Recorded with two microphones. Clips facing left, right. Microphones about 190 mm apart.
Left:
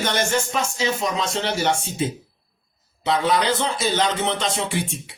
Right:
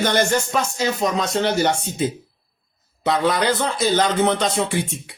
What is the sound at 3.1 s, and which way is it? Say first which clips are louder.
Speech: right 1 dB; 55° right (ahead or behind).